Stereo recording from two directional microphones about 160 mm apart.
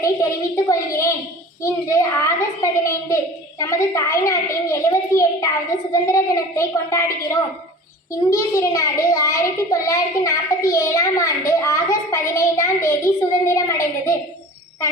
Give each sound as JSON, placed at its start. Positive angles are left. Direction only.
{"t": 0.0, "sound": "a woman's voice", "side_deg": 20}